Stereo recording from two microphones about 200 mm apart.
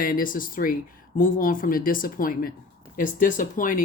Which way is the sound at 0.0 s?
45° left (ahead or behind).